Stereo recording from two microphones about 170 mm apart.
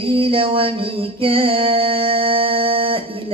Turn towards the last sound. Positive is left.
turn(degrees=-30)  # may be behind; listen again after turning